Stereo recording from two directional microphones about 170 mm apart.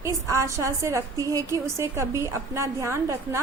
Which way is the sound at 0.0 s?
20° right (ahead or behind).